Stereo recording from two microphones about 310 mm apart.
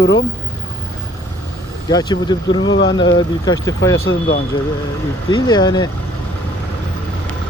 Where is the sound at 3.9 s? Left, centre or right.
Left.